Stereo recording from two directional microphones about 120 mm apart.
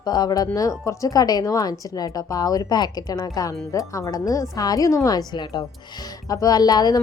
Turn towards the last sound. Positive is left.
turn(degrees=35)  # may be behind; listen again after turning